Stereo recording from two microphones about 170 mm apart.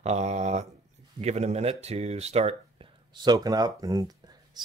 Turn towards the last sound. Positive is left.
turn(degrees=-20)  # may be behind; listen again after turning